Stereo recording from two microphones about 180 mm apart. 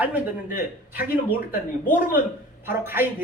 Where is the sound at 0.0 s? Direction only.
10° right (ahead or behind).